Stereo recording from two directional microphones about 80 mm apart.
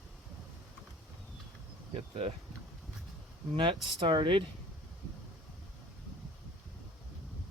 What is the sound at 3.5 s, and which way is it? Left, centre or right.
Speech, right.